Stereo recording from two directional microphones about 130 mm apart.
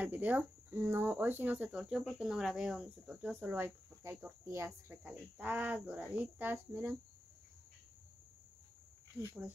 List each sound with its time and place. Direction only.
0.0 s speech: 10° right (ahead or behind)
9.2 s speech: 15° right (ahead or behind)